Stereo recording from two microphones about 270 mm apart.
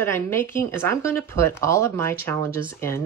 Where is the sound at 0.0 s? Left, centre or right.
Centre.